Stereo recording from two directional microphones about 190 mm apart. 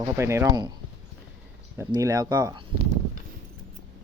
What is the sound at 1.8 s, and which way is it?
Speech, 15° right (ahead or behind).